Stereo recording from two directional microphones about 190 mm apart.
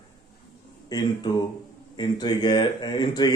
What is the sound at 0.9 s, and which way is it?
Speech, 20° left (ahead or behind).